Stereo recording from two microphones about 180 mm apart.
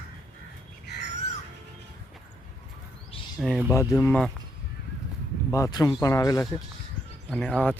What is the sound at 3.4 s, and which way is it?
Speech, 5° right (ahead or behind).